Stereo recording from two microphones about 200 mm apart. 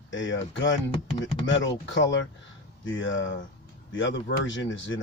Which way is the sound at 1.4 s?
65° left (ahead or behind).